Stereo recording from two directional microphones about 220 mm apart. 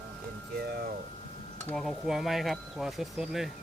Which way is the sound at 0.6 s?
45° right (ahead or behind).